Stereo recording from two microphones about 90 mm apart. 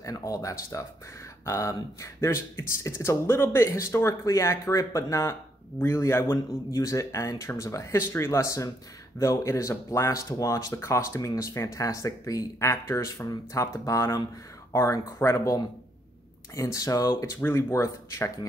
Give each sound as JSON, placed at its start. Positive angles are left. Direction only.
{"t": 0.0, "sound": "speech", "side_deg": 40}
{"t": 17.4, "sound": "speech", "side_deg": 30}